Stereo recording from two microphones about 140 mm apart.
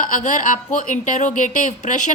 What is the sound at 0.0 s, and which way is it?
A woman's voice, 65° left (ahead or behind).